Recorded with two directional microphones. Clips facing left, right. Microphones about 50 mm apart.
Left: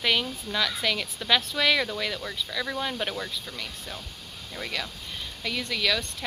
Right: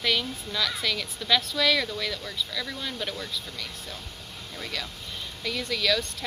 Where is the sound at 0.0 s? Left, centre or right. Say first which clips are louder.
Left 1 dB; centre.